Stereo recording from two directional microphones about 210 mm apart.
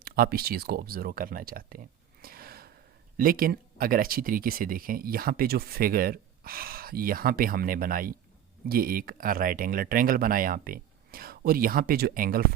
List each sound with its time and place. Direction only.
0.0 s speech: 45° right (ahead or behind)